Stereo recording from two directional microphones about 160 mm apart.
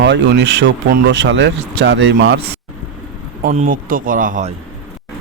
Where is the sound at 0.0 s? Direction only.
90° right.